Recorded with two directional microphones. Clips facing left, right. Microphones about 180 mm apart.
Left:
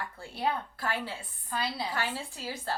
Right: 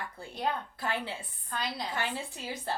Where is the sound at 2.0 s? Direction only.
20° right (ahead or behind).